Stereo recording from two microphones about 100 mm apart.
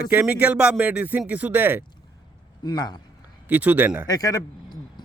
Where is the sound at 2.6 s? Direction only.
45° left (ahead or behind).